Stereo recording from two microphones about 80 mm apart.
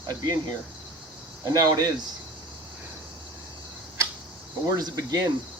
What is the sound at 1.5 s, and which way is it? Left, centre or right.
Speech, right.